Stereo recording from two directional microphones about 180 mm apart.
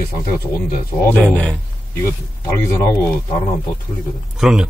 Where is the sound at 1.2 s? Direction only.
10° left (ahead or behind).